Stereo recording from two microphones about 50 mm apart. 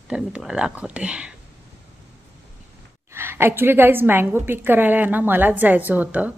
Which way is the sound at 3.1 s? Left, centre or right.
Right.